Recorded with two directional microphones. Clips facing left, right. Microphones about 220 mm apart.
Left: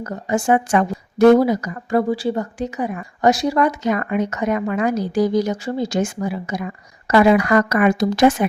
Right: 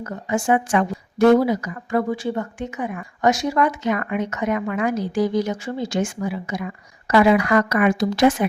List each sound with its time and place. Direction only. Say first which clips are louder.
0.0 s speech: left 2 dB; 40° left (ahead or behind)